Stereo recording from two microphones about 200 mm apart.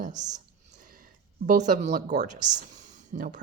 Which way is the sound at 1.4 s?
40° right (ahead or behind).